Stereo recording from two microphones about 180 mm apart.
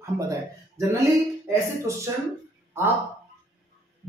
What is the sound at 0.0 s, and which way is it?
Speech, 15° right (ahead or behind).